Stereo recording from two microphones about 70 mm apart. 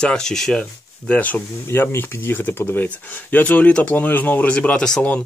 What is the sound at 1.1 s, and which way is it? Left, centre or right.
Speech, left.